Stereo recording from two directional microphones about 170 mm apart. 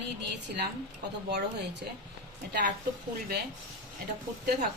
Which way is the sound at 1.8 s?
70° right (ahead or behind).